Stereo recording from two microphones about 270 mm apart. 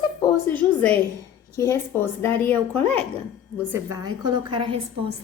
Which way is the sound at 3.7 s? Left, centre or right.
Centre.